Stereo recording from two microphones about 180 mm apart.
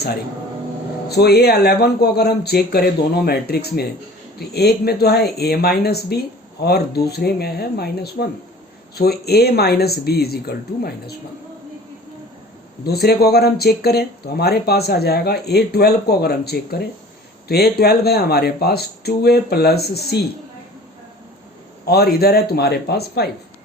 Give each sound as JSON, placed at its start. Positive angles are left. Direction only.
{"t": 1.0, "sound": "speech", "side_deg": 60}
{"t": 12.8, "sound": "speech", "side_deg": 60}
{"t": 21.8, "sound": "speech", "side_deg": 60}